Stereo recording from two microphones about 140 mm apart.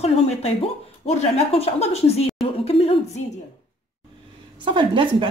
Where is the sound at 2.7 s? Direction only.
45° left (ahead or behind).